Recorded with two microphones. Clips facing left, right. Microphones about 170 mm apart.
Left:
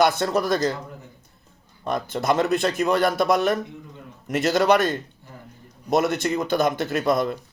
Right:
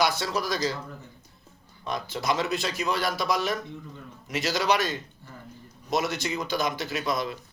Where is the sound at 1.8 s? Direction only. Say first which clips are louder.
Left 6 dB; 50° left (ahead or behind).